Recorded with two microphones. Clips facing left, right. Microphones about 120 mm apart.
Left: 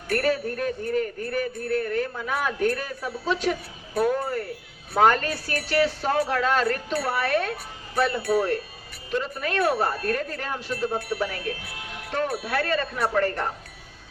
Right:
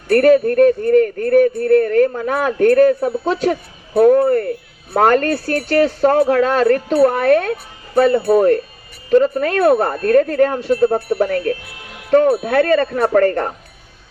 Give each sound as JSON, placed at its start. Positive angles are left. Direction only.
{"t": 0.1, "sound": "speech", "side_deg": -55}
{"t": 4.2, "sound": "speech", "side_deg": -60}
{"t": 4.9, "sound": "speech", "side_deg": -50}
{"t": 11.2, "sound": "speech", "side_deg": -50}
{"t": 12.3, "sound": "speech", "side_deg": -35}
{"t": 12.5, "sound": "speech", "side_deg": -55}
{"t": 12.8, "sound": "speech", "side_deg": -40}